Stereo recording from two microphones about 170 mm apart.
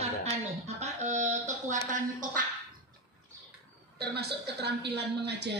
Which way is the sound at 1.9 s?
50° right (ahead or behind).